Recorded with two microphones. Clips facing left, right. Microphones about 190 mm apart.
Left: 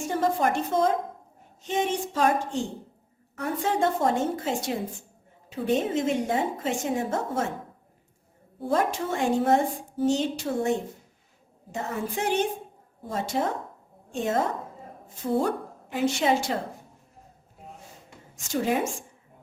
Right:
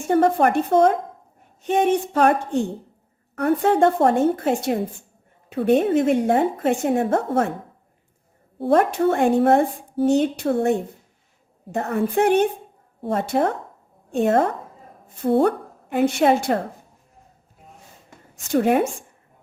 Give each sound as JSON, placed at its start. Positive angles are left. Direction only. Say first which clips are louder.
{"t": 0.0, "sound": "a woman's voice", "louder": "right 7 dB", "side_deg": -60}
{"t": 8.5, "sound": "a woman's voice", "louder": "right 7 dB", "side_deg": -65}
{"t": 18.3, "sound": "a woman's voice", "louder": "right 7 dB", "side_deg": -60}